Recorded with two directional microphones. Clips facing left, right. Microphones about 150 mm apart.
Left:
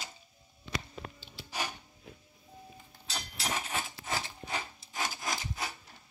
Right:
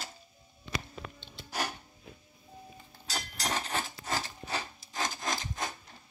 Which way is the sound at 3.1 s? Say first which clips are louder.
Right 2 dB; 40° right (ahead or behind).